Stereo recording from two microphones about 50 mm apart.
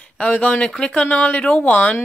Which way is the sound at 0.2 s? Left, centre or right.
Left.